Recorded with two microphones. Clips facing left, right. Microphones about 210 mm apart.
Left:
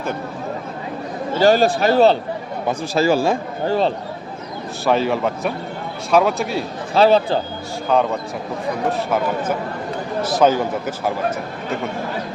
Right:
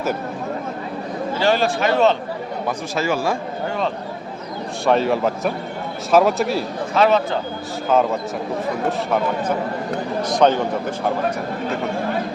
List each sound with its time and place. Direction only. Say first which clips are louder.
1.4 s speech: left 5 dB; 40° left (ahead or behind)
4.9 s a man's voice: right 1 dB; centre (ahead or behind)
6.9 s speech: left 3 dB; 30° left (ahead or behind)
7.9 s a man's voice: even; centre (ahead or behind)
10.2 s a man's voice: left 1 dB; 5° left (ahead or behind)